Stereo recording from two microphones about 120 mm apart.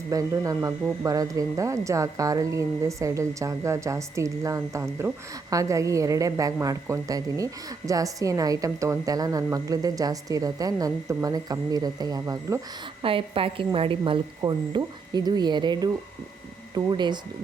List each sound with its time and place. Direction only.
0.1 s speech: 30° right (ahead or behind)
13.0 s a woman's voice: 50° right (ahead or behind)